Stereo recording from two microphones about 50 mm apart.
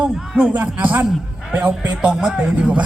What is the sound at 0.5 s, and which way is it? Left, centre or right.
Speech, right.